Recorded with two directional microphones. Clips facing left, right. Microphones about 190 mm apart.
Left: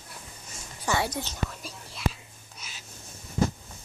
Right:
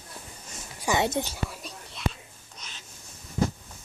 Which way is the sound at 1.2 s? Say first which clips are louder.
Even; 10° right (ahead or behind).